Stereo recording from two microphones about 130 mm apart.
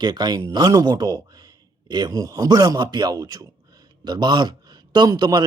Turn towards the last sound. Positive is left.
turn(degrees=-30)  # may be behind; listen again after turning